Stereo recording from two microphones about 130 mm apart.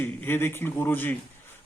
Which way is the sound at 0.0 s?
15° left (ahead or behind).